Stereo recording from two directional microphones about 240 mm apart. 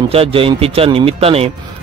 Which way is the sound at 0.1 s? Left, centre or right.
Right.